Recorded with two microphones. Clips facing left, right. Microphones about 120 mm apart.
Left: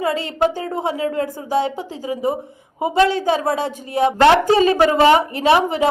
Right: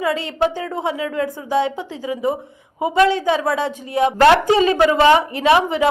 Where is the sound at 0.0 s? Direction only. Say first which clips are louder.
Left 1 dB; 35° left (ahead or behind).